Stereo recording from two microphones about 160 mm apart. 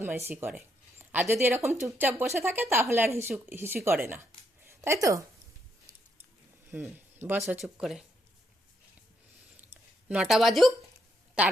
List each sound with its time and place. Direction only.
0.0 s speech: 10° right (ahead or behind)
4.6 s a sound: 15° right (ahead or behind)
6.7 s speech: 10° right (ahead or behind)
7.6 s a woman's voice: centre (ahead or behind)
10.1 s a woman's voice: 5° right (ahead or behind)